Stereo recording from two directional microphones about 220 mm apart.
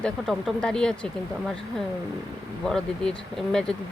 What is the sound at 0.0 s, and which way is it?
Speech, 5° left (ahead or behind).